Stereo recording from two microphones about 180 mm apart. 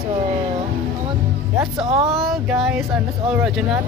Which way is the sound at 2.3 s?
5° right (ahead or behind).